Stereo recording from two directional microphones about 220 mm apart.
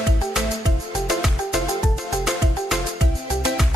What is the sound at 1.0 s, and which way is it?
Music, centre (ahead or behind).